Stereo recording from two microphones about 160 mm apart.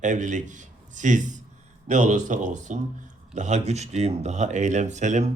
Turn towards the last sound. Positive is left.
turn(degrees=-45)  # may be behind; listen again after turning